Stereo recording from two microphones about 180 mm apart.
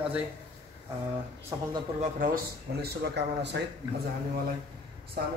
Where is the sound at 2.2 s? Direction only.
55° right (ahead or behind).